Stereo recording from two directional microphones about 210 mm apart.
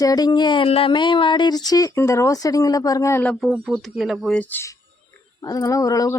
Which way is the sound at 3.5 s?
5° right (ahead or behind).